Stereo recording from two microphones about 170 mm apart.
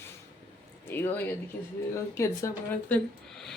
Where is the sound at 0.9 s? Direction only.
15° left (ahead or behind).